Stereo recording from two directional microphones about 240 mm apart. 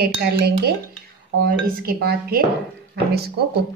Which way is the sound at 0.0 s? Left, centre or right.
Right.